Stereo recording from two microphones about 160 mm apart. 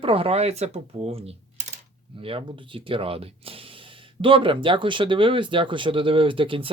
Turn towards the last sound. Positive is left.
turn(degrees=-35)  # may be behind; listen again after turning